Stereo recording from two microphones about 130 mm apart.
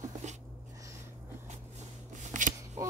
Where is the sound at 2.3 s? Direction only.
75° right (ahead or behind).